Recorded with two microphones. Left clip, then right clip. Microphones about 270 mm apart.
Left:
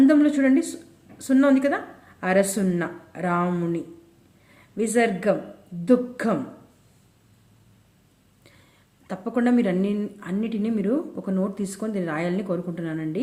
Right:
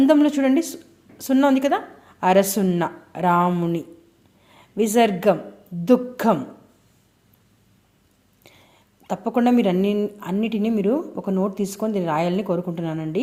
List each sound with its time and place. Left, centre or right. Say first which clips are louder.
0.0 s a woman's voice: right 2 dB; centre
9.0 s speech: right 4 dB; centre